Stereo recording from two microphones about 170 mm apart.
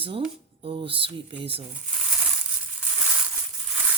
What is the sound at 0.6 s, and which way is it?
Speech, 35° right (ahead or behind).